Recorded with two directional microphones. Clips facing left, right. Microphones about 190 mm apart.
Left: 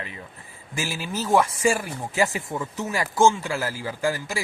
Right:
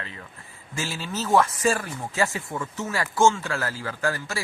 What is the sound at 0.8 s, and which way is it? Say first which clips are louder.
Speech: left 1 dB; 10° left (ahead or behind).